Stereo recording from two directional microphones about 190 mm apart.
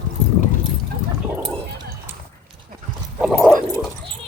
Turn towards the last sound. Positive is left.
turn(degrees=0)  # may be behind; listen again after turning